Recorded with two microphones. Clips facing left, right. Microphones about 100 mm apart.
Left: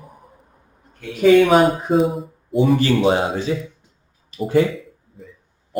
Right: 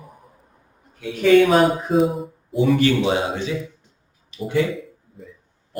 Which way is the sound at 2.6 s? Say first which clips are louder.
Left 1 dB; 40° left (ahead or behind).